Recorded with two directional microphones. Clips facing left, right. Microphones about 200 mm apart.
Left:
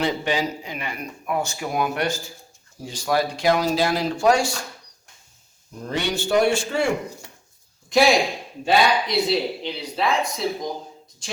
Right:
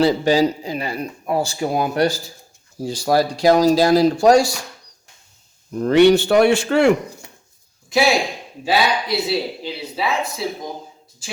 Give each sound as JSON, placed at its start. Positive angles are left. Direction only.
{"t": 0.0, "sound": "speech", "side_deg": -35}
{"t": 5.7, "sound": "a man's voice", "side_deg": -65}
{"t": 7.9, "sound": "speech", "side_deg": 0}